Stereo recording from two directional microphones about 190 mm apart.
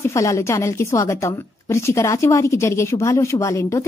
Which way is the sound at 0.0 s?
15° left (ahead or behind).